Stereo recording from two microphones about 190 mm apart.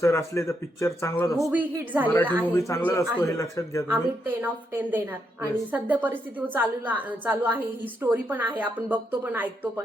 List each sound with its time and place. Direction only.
0.0 s speech: 15° left (ahead or behind)
1.4 s a woman's voice: centre (ahead or behind)
2.5 s speech: 10° left (ahead or behind)
3.8 s a woman's voice: 10° right (ahead or behind)